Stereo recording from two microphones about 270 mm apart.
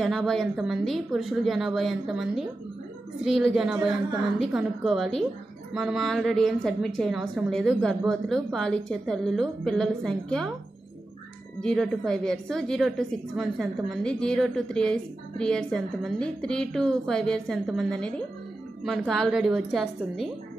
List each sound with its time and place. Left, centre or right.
0.0 s a woman's voice: centre
3.5 s a woman's voice: centre
11.6 s a woman's voice: centre